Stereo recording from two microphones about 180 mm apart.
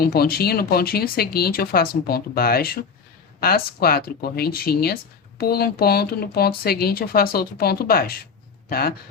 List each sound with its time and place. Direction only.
0.0 s speech: 60° left (ahead or behind)